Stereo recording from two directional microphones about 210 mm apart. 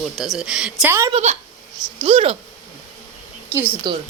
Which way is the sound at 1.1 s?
30° right (ahead or behind).